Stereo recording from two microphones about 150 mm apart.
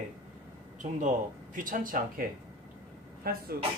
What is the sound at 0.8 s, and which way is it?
Speech, 60° right (ahead or behind).